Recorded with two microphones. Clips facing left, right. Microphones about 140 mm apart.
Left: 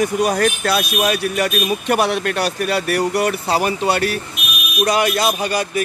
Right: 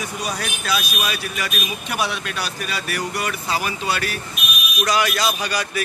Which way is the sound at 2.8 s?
55° left (ahead or behind).